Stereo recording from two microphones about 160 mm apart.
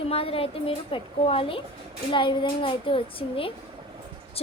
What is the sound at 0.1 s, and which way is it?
A woman's voice, 35° left (ahead or behind).